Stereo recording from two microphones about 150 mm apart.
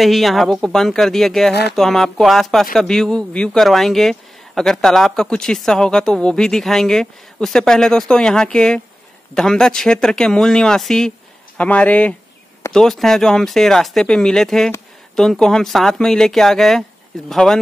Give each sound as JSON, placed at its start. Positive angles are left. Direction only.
{"t": 0.0, "sound": "speech", "side_deg": 0}
{"t": 1.5, "sound": "speech", "side_deg": 90}
{"t": 1.8, "sound": "speech", "side_deg": 0}